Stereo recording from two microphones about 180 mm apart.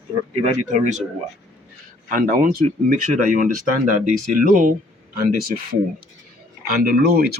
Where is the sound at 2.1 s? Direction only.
50° right (ahead or behind).